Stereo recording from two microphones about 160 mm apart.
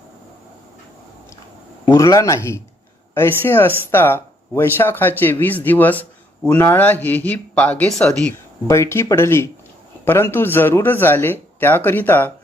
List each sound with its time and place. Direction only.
1.8 s speech: 20° left (ahead or behind); by 8.4 s 5° left (ahead or behind)
8.6 s speech: 15° left (ahead or behind)